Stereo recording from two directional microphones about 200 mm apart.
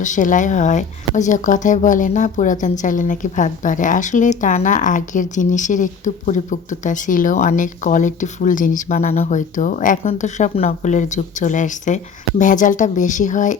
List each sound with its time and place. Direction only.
0.0 s speech: 40° left (ahead or behind)